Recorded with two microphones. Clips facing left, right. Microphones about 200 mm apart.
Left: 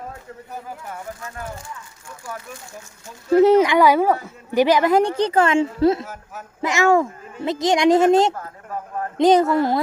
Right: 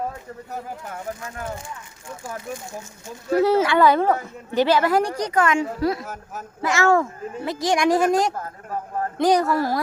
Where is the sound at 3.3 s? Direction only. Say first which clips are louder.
Left 5 dB; 20° left (ahead or behind).